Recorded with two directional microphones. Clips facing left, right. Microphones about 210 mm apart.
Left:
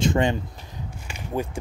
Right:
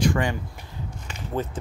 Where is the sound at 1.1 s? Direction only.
10° left (ahead or behind).